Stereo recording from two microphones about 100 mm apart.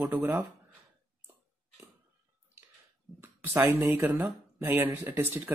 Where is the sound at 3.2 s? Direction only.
25° right (ahead or behind).